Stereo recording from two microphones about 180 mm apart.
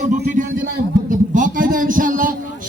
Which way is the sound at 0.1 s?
45° right (ahead or behind).